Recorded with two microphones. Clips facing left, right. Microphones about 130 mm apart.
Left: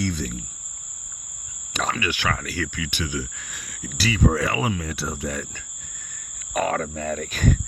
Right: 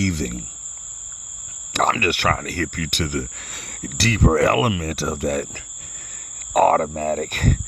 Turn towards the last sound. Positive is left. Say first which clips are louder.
# right 2 dB
turn(degrees=-60)  # may be behind; listen again after turning